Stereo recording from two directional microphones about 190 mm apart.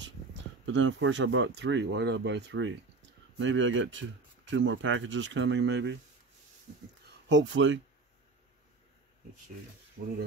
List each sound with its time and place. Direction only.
0.7 s speech: 80° right
3.3 s speech: 80° right
7.2 s speech: 75° right (ahead or behind)
10.0 s speech: 90° right